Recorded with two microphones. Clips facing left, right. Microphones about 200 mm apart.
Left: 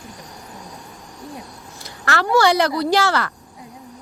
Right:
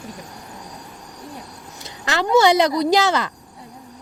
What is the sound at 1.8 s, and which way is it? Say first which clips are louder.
Speech: even; 20° right (ahead or behind).